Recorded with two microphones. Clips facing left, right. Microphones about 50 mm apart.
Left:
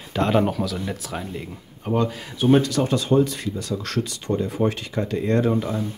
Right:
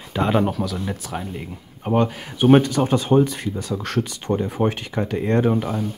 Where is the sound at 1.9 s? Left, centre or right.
Right.